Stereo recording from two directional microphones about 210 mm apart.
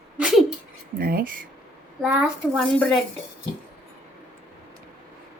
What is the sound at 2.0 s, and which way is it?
Speech, 5° right (ahead or behind).